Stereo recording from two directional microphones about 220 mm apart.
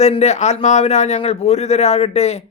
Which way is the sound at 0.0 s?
30° left (ahead or behind).